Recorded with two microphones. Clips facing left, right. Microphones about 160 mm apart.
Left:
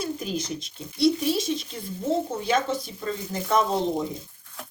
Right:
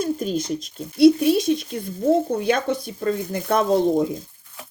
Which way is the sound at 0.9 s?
55° right (ahead or behind).